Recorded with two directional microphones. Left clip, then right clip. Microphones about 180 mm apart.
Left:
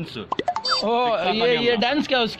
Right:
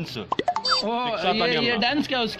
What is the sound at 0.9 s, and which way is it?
A man's voice, 25° left (ahead or behind).